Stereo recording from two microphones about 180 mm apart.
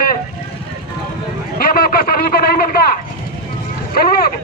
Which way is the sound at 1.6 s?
55° left (ahead or behind).